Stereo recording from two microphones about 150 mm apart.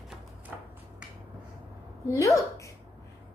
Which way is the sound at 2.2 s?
20° left (ahead or behind).